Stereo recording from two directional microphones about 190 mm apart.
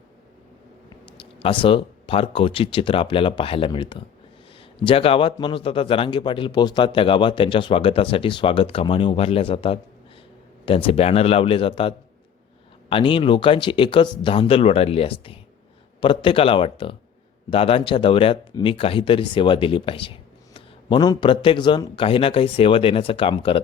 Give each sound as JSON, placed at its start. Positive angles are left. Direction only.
{"t": 1.1, "sound": "speech", "side_deg": 25}